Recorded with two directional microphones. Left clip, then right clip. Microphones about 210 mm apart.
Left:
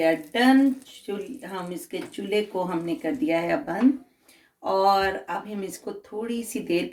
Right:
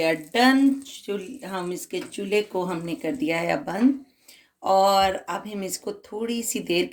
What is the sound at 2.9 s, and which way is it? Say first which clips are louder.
Speech: left 1 dB; 50° right (ahead or behind).